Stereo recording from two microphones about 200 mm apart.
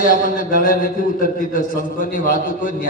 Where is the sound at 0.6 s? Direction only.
45° left (ahead or behind).